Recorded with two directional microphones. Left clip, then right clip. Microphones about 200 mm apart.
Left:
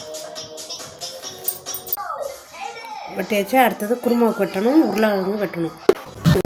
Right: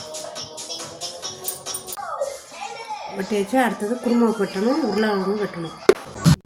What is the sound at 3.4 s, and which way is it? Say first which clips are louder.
Speech: left 4 dB; 45° left (ahead or behind).